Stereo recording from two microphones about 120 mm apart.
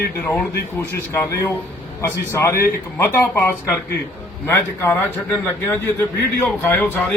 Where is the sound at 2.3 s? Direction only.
25° left (ahead or behind).